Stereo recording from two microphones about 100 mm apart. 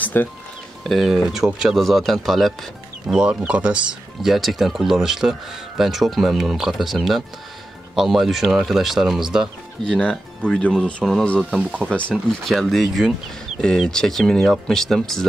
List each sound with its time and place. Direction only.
0.0 s music: 20° left (ahead or behind)
0.8 s speech: centre (ahead or behind)
4.2 s speech: centre (ahead or behind)
9.8 s speech: 10° left (ahead or behind)